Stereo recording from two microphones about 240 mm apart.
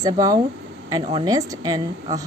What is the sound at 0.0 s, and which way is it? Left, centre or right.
A woman's voice, centre.